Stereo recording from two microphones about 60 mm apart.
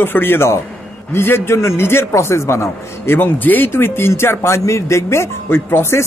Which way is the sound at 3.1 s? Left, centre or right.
Left.